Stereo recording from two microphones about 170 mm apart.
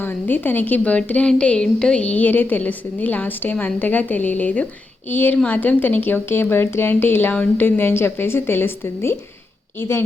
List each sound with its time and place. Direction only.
0.0 s a woman's voice: 10° left (ahead or behind)